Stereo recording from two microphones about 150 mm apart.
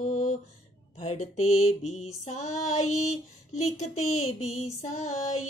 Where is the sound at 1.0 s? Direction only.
45° left (ahead or behind).